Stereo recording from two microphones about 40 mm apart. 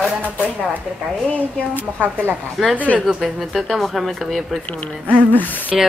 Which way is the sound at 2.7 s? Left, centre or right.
Left.